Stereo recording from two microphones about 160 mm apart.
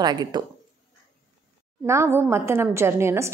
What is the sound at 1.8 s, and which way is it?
A woman's voice, 15° right (ahead or behind).